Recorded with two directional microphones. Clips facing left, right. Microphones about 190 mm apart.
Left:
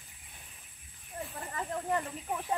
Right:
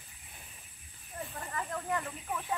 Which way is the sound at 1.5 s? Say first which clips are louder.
Left 2 dB; 25° left (ahead or behind).